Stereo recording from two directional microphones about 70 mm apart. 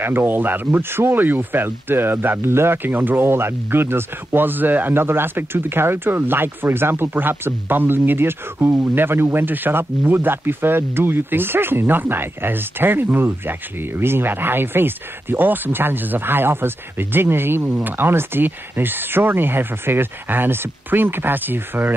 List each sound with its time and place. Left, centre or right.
0.0 s speech: right